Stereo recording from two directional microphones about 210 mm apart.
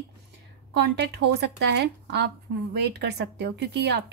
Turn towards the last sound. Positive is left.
turn(degrees=-50)  # may be behind; listen again after turning